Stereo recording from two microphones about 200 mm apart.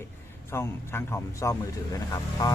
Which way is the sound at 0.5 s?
10° left (ahead or behind).